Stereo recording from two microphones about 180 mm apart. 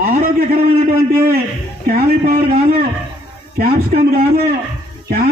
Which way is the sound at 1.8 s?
50° right (ahead or behind).